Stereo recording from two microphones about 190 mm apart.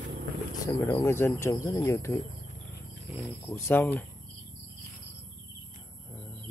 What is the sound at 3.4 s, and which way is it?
Speech, 15° left (ahead or behind).